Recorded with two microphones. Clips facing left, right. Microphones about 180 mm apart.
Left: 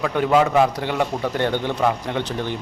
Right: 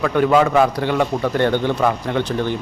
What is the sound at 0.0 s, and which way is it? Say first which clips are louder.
A man's voice: right 3 dB; 15° left (ahead or behind).